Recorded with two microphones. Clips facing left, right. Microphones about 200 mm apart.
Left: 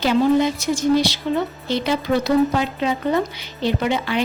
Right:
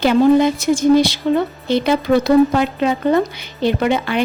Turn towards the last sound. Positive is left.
turn(degrees=-55)  # may be behind; listen again after turning